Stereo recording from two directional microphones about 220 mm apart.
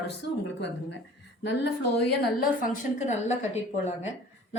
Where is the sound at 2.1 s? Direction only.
45° left (ahead or behind).